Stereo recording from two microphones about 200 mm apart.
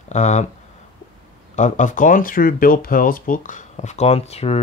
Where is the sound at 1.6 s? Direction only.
40° left (ahead or behind).